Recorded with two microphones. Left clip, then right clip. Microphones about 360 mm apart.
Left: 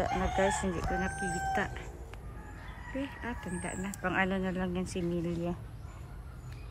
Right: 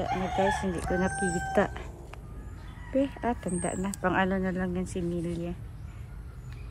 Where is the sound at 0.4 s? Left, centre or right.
Centre.